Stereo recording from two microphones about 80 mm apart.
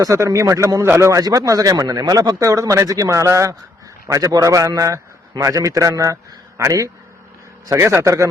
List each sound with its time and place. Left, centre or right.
0.0 s a man's voice: right